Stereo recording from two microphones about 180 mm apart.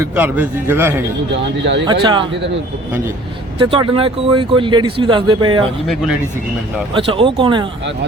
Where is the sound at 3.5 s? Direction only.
30° right (ahead or behind).